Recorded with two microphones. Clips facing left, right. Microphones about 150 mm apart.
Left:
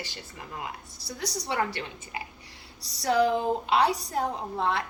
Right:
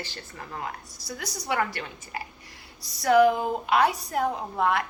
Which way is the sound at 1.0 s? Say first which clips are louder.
Left 2 dB; 30° left (ahead or behind).